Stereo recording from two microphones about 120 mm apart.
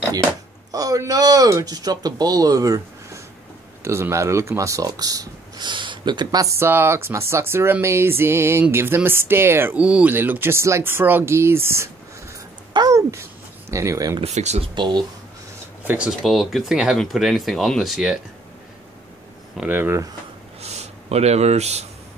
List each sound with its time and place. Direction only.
0.7 s speech: 30° right (ahead or behind)
3.8 s speech: 20° right (ahead or behind)
12.7 s a sound: 30° right (ahead or behind)
14.2 s speech: 65° right (ahead or behind)
14.8 s speech: 40° right (ahead or behind)
15.8 s speech: 15° right (ahead or behind)
16.2 s speech: centre (ahead or behind)
19.5 s speech: 15° right (ahead or behind)
20.6 s a sound: 60° right (ahead or behind)